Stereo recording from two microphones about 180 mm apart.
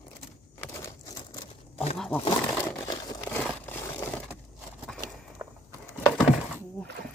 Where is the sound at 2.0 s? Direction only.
5° left (ahead or behind).